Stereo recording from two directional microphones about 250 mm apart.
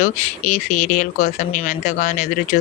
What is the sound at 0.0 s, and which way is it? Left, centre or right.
Speech, left.